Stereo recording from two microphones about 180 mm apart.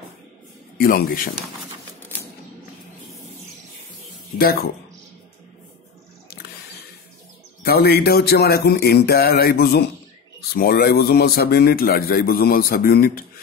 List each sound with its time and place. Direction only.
0.7 s a man's voice: 55° left (ahead or behind)
4.4 s a man's voice: 55° left (ahead or behind)
7.6 s a man's voice: 60° left (ahead or behind)